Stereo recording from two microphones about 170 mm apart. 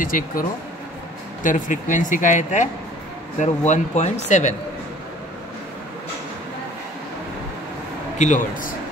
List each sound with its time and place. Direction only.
0.0 s speech: 55° left (ahead or behind)
8.2 s speech: 50° left (ahead or behind)